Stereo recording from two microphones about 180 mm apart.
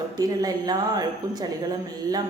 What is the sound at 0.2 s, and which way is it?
A woman's voice, 20° right (ahead or behind).